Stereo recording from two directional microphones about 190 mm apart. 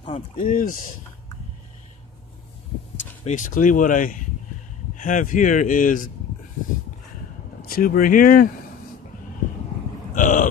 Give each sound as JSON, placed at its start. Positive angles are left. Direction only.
{"t": 0.4, "sound": "speech", "side_deg": 45}
{"t": 3.3, "sound": "speech", "side_deg": 45}
{"t": 7.6, "sound": "speech", "side_deg": 50}
{"t": 10.1, "sound": "vehicle", "side_deg": 45}